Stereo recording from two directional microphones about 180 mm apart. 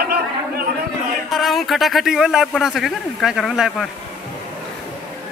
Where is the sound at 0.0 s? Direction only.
60° right (ahead or behind).